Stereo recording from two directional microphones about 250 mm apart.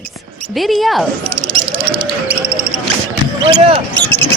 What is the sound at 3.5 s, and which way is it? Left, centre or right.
Speech, right.